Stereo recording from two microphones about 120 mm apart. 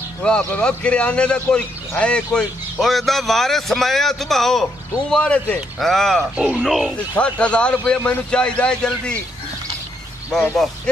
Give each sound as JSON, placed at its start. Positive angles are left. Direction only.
{"t": 0.2, "sound": "a man's voice", "side_deg": 10}
{"t": 7.2, "sound": "a man's voice", "side_deg": 10}
{"t": 10.3, "sound": "a man's voice", "side_deg": 0}